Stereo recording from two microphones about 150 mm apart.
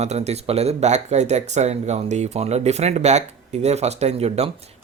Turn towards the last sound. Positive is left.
turn(degrees=-45)  # may be behind; listen again after turning